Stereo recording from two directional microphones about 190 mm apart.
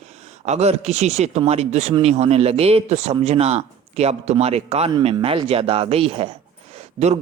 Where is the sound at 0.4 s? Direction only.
35° right (ahead or behind).